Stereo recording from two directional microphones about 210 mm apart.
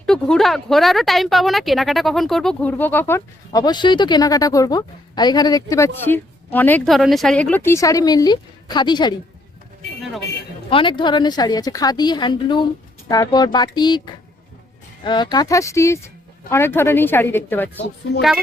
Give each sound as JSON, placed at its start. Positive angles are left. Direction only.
{"t": 0.0, "sound": "a woman's voice", "side_deg": 5}
{"t": 10.7, "sound": "a woman's voice", "side_deg": 25}